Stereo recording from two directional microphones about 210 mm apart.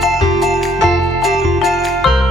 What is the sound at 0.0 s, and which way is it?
Music, centre (ahead or behind).